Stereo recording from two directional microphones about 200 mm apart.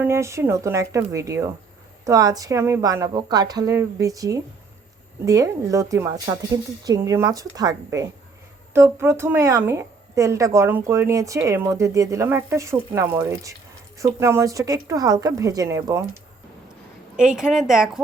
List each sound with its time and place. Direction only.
0.0 s a woman's voice: 15° right (ahead or behind)
17.2 s a woman's voice: 5° right (ahead or behind)